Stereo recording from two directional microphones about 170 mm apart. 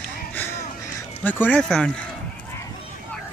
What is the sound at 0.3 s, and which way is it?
Crow, 15° left (ahead or behind).